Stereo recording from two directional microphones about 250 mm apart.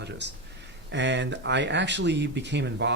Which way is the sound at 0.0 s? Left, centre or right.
Right.